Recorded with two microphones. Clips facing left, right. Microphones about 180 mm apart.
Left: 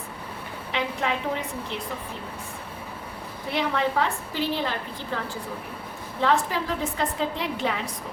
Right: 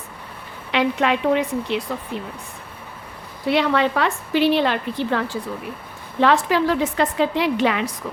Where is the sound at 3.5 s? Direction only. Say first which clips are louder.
Right 6 dB; 80° right.